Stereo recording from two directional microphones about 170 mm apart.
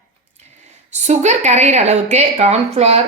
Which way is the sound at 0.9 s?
40° right (ahead or behind).